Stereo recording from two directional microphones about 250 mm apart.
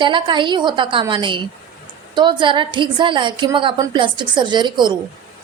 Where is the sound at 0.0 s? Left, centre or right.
Centre.